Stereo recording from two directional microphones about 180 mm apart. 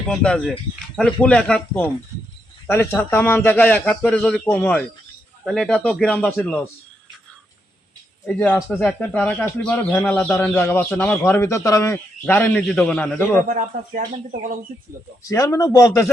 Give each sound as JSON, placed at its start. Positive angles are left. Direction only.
{"t": 0.1, "sound": "speech", "side_deg": 5}
{"t": 5.5, "sound": "speech", "side_deg": 0}
{"t": 8.3, "sound": "speech", "side_deg": 10}
{"t": 13.5, "sound": "speech", "side_deg": -45}
{"t": 15.3, "sound": "a man's voice", "side_deg": 20}